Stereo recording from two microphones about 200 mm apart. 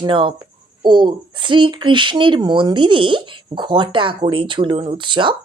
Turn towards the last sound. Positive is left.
turn(degrees=-25)  # may be behind; listen again after turning